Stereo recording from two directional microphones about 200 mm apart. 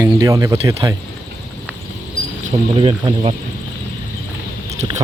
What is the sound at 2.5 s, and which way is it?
Speech, 25° right (ahead or behind).